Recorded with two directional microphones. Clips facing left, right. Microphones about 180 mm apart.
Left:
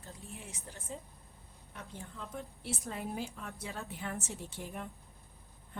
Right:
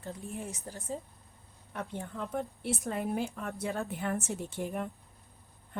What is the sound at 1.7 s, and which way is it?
A woman's voice, 60° right (ahead or behind).